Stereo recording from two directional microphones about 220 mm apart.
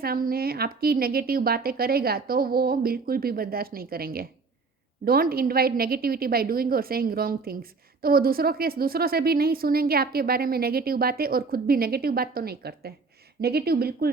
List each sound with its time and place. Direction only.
0.0 s a woman's voice: 40° right (ahead or behind)